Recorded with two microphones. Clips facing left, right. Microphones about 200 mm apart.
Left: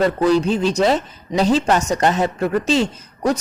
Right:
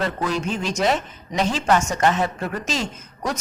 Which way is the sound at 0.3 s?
35° left (ahead or behind).